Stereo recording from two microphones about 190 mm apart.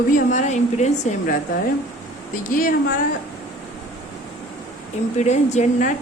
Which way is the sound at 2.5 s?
45° left (ahead or behind).